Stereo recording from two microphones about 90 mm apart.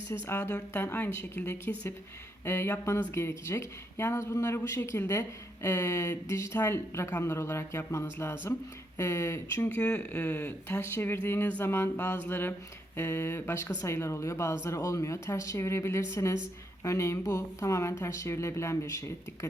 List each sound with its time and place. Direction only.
0.3 s speech: 30° left (ahead or behind)
9.6 s speech: 15° left (ahead or behind); by 19.5 s 35° left (ahead or behind)